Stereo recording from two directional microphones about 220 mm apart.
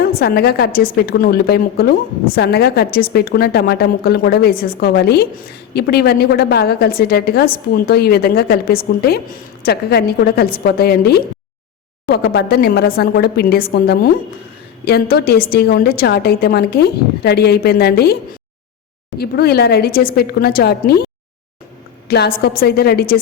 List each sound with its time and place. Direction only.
0.0 s a woman's voice: 45° left (ahead or behind)